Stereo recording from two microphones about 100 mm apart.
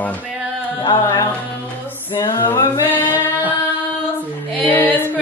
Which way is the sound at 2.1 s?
50° left (ahead or behind).